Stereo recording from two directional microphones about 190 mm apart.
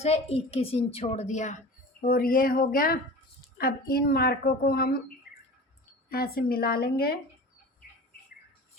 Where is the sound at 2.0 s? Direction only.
50° left (ahead or behind).